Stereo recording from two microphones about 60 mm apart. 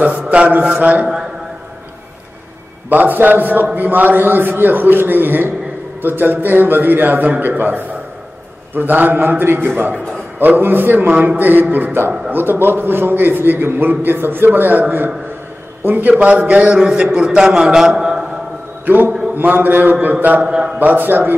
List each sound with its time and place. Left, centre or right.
0.3 s a sound: right
1.0 s a sound: centre
2.9 s a man's voice: right; by 18.2 s centre
18.9 s a man's voice: right
20.4 s a man's voice: centre
20.8 s a man's voice: right